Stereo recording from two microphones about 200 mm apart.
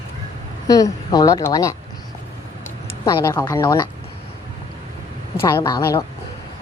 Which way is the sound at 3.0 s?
15° left (ahead or behind).